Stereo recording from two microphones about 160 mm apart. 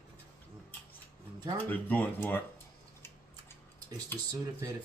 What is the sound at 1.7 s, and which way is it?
Speech, 10° left (ahead or behind).